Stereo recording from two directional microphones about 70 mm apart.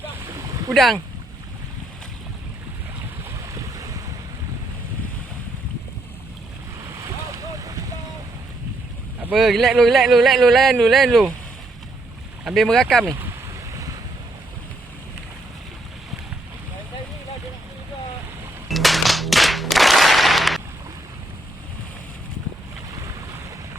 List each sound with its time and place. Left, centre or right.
0.7 s speech: centre
3.3 s boat: right
6.9 s boat: right
9.3 s speech: centre
12.5 s speech: centre
18.7 s a sound: centre